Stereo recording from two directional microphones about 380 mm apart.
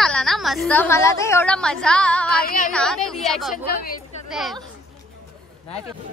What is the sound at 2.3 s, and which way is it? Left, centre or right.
Speech, left.